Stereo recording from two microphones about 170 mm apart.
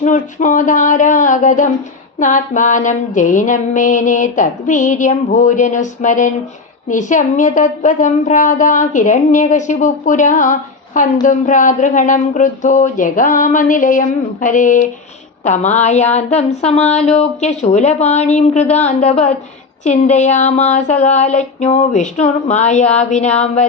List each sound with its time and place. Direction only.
0.0 s a woman's voice: 45° left (ahead or behind)